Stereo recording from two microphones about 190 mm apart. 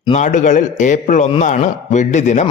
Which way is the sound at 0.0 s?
40° left (ahead or behind).